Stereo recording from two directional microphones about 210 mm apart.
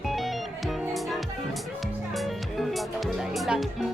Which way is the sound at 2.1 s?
Centre (ahead or behind).